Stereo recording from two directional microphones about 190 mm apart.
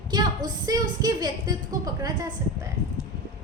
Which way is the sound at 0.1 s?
20° right (ahead or behind).